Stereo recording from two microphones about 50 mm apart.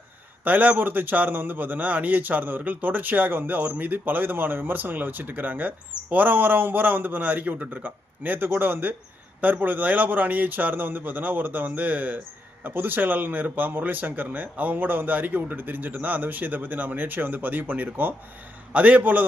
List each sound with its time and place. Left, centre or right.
0.4 s a man's voice: right